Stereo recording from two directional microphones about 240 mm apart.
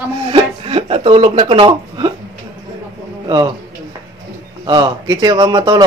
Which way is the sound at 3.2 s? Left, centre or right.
Centre.